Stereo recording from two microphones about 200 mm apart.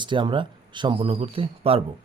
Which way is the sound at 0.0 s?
25° right (ahead or behind).